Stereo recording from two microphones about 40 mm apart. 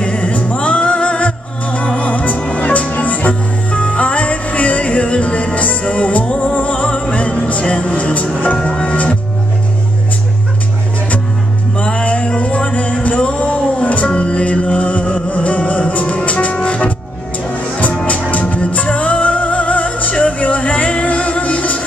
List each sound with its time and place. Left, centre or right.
0.0 s music: left
2.9 s music: left
11.8 s music: left
17.5 s music: left